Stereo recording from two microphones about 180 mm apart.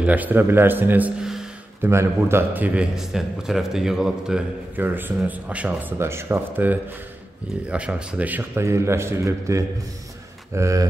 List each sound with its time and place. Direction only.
0.0 s a man's voice: 10° right (ahead or behind)
1.9 s a man's voice: 15° right (ahead or behind)